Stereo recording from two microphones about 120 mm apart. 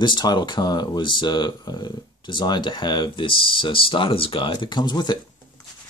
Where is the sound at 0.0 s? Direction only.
35° left (ahead or behind).